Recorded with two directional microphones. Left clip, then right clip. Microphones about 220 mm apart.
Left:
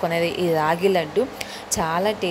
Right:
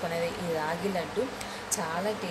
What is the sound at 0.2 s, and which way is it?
Speech, 40° left (ahead or behind).